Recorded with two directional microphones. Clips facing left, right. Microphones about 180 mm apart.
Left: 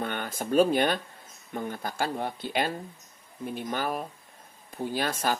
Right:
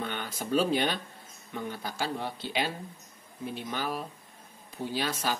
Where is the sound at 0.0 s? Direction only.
50° left (ahead or behind).